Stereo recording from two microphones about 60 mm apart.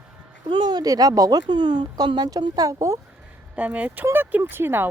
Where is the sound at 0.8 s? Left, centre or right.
Right.